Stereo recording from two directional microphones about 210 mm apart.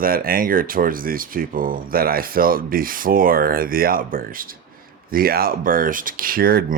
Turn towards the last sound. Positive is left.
turn(degrees=-45)  # may be behind; listen again after turning